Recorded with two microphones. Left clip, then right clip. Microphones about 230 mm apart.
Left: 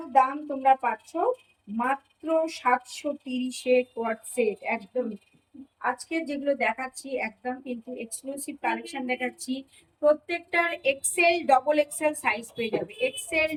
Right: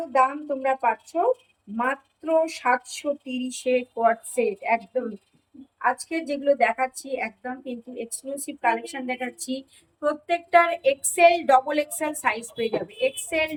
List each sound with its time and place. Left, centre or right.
0.1 s a woman's voice: centre
5.8 s a woman's voice: centre